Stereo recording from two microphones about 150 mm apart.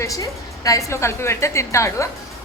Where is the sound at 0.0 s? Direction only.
20° left (ahead or behind).